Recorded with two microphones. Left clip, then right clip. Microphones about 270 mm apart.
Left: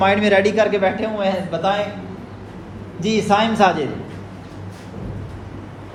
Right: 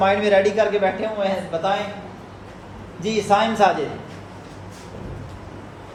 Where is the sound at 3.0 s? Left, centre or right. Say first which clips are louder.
Left 1 dB; left.